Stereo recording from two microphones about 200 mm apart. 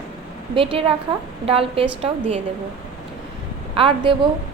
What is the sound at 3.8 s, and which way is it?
Speech, 25° right (ahead or behind).